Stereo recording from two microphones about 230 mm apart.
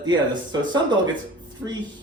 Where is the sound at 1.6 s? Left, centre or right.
Centre.